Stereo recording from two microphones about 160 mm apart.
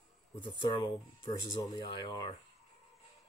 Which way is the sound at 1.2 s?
25° left (ahead or behind).